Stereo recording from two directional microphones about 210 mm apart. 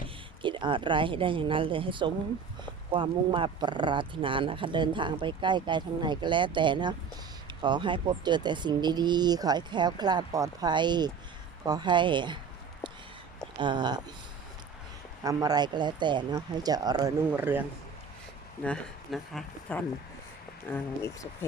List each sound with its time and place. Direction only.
0.4 s speech: 25° right (ahead or behind)
13.6 s speech: 20° right (ahead or behind)
15.2 s speech: 15° right (ahead or behind)
18.6 s speech: 5° left (ahead or behind)